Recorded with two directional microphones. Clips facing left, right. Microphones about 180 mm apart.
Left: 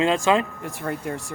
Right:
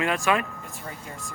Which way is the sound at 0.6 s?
65° left (ahead or behind).